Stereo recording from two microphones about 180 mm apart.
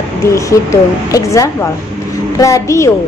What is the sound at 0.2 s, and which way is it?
A woman's voice, 15° left (ahead or behind).